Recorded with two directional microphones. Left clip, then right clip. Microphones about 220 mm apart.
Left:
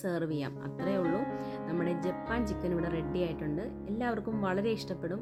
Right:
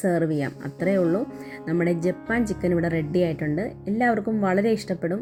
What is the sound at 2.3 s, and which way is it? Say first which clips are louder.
Speech: right 10 dB; 5° right (ahead or behind).